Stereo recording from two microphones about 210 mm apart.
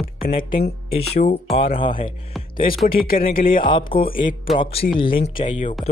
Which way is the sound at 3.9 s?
25° left (ahead or behind).